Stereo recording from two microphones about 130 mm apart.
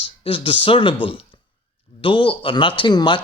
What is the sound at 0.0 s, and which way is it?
Speech, 40° left (ahead or behind).